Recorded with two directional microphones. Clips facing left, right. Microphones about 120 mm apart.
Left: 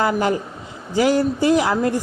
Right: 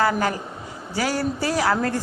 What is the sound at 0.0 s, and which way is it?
A woman's voice, 20° left (ahead or behind).